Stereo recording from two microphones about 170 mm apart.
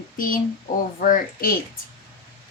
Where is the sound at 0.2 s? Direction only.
55° left (ahead or behind).